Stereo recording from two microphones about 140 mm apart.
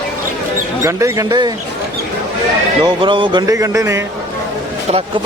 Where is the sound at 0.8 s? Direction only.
20° right (ahead or behind).